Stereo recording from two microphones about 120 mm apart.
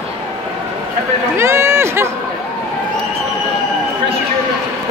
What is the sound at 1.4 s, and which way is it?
Run, 20° right (ahead or behind).